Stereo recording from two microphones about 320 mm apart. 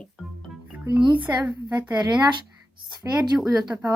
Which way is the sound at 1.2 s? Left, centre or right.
Centre.